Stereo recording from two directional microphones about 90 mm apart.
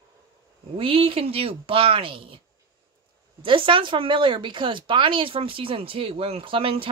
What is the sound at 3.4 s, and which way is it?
Speech, 70° right (ahead or behind).